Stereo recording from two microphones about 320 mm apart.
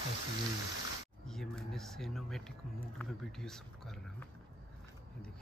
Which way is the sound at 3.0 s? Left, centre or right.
Centre.